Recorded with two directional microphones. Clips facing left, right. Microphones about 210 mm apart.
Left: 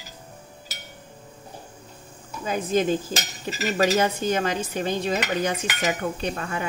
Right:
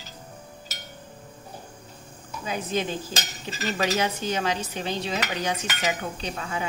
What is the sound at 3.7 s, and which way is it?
Dishes, 45° left (ahead or behind).